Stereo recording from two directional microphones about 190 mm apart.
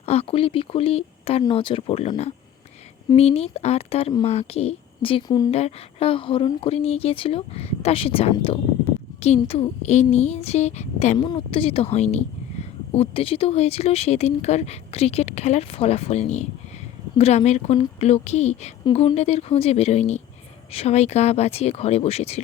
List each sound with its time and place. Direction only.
0.0 s a woman's voice: 35° left (ahead or behind)